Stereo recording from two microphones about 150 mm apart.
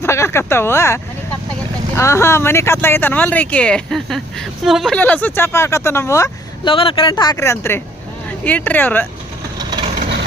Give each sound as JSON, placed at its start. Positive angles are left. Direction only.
{"t": 0.0, "sound": "speech", "side_deg": 15}
{"t": 2.0, "sound": "speech", "side_deg": 20}
{"t": 4.9, "sound": "speech", "side_deg": 10}
{"t": 6.7, "sound": "speech", "side_deg": 35}